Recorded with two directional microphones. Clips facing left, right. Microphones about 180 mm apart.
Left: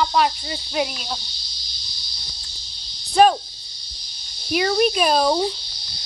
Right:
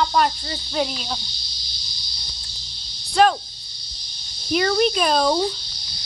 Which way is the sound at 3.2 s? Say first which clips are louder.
Left 2 dB; 15° left (ahead or behind).